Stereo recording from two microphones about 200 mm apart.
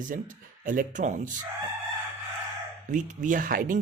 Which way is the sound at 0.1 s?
40° right (ahead or behind).